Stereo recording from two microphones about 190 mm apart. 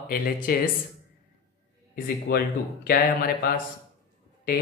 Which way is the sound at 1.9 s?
55° left (ahead or behind).